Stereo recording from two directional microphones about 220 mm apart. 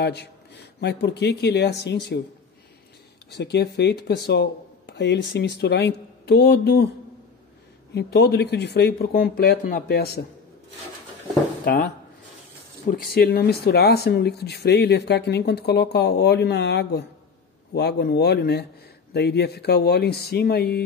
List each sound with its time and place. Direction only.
0.0 s speech: 50° left (ahead or behind)
3.3 s speech: 50° left (ahead or behind)
7.9 s speech: 50° left (ahead or behind)
11.6 s speech: 45° left (ahead or behind)